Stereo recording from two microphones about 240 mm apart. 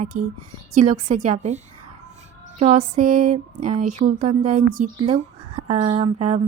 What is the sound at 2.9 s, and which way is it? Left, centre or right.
A woman's voice, right.